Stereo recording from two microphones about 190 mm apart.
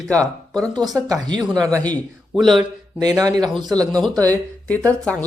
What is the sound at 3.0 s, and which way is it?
Speech, 20° right (ahead or behind).